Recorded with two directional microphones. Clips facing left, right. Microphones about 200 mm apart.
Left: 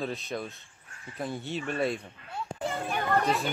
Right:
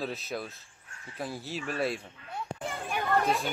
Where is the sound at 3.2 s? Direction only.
Centre (ahead or behind).